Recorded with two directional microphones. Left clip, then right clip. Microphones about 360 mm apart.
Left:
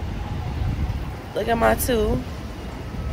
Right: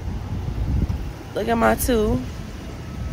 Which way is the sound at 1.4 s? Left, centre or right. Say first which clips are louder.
Even; centre.